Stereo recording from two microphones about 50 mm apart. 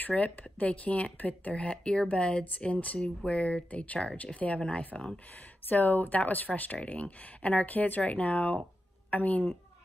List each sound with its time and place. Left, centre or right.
0.2 s speech: left
5.7 s speech: left